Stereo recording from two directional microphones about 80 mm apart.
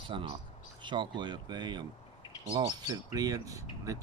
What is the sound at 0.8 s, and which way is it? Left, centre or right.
Speech, right.